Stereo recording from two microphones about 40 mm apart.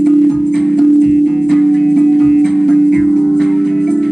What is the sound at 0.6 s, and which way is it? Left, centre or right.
Music, centre.